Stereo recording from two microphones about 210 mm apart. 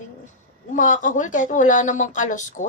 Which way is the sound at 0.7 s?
35° left (ahead or behind).